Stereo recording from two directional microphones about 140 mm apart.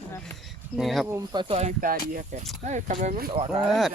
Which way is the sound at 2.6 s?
60° right (ahead or behind).